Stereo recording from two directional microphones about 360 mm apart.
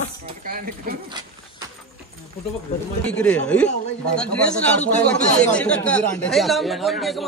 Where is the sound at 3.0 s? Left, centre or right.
Centre.